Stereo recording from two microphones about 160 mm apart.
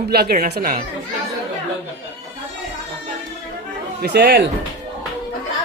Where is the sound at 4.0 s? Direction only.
85° right.